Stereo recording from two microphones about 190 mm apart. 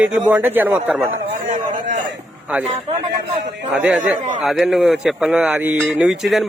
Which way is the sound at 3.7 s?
5° right (ahead or behind).